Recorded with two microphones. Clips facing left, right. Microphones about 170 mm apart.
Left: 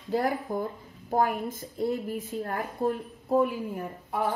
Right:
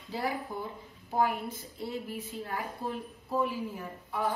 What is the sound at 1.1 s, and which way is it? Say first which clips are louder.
A woman's voice: left 3 dB; 50° left (ahead or behind).